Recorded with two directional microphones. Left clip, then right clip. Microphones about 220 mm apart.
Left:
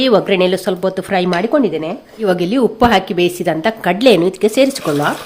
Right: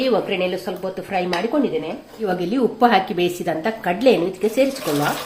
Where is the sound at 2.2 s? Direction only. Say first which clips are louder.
Left 6 dB; 40° left (ahead or behind).